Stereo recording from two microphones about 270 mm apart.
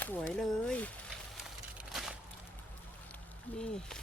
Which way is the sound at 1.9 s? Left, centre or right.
Centre.